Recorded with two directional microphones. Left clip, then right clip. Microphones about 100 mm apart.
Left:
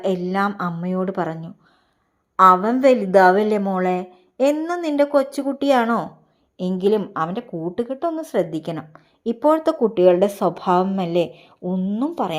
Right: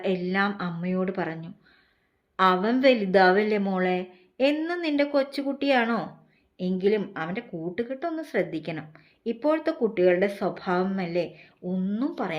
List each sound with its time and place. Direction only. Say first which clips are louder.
0.0 s a woman's voice: left 5 dB; 50° left (ahead or behind)
2.3 s a woman's voice: left 9 dB; 40° left (ahead or behind)
3.6 s a woman's voice: left 5 dB; 30° left (ahead or behind)
3.8 s a woman's voice: left 5 dB; 45° left (ahead or behind)
6.6 s a woman's voice: left 5 dB; 60° left (ahead or behind)
9.2 s speech: left 8 dB; 60° left (ahead or behind)
10.2 s a woman's voice: left 7 dB; 85° left; by 11.0 s 70° left (ahead or behind)
11.6 s a woman's voice: left 6 dB; 50° left (ahead or behind)